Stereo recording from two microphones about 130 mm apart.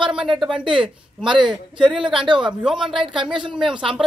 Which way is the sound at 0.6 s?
40° right (ahead or behind).